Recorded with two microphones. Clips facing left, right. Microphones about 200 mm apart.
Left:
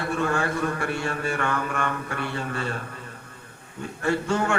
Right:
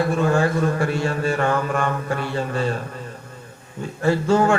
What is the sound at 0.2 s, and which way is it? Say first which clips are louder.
A man's voice: right 6 dB; 40° right (ahead or behind).